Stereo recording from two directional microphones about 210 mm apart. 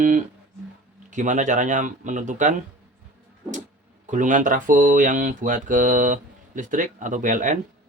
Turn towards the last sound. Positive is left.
turn(degrees=-40)  # may be behind; listen again after turning